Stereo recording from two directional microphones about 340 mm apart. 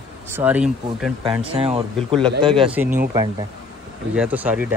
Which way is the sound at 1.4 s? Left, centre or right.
Centre.